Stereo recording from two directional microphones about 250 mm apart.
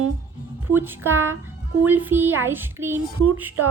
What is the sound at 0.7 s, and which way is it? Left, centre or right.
Speech, centre.